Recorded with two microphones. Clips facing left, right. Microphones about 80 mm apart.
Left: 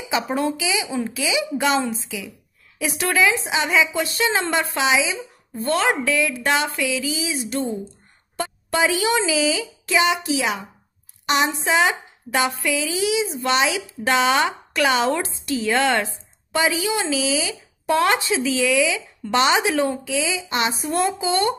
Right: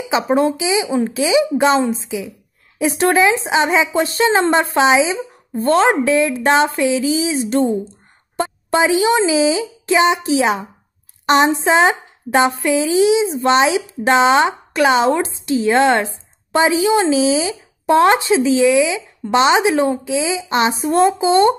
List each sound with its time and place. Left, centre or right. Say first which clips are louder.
0.1 s speech: right 7 dB; right